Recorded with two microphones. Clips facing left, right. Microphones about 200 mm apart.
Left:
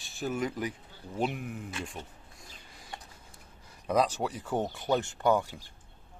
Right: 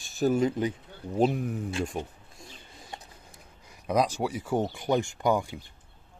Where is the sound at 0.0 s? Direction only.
40° right (ahead or behind).